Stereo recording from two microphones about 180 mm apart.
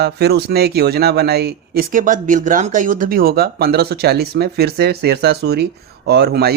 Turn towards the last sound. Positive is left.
turn(degrees=-65)  # may be behind; listen again after turning